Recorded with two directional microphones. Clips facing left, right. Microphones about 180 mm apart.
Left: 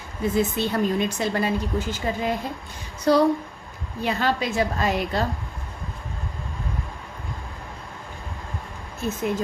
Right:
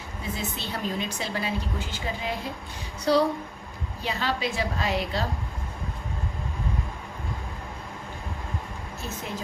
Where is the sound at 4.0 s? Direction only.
50° left (ahead or behind).